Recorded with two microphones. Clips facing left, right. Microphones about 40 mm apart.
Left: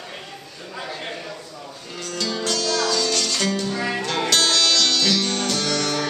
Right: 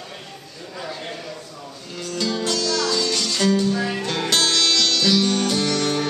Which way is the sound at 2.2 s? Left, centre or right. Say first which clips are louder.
Right 1 dB; centre.